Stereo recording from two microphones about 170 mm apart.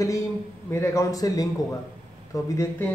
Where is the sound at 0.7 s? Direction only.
15° left (ahead or behind).